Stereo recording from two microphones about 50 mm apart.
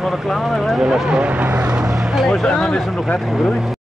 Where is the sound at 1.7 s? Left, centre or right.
Centre.